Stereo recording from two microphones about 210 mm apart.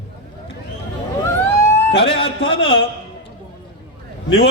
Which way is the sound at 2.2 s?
25° left (ahead or behind).